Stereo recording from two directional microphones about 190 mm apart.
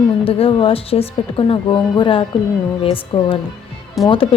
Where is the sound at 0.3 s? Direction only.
30° left (ahead or behind).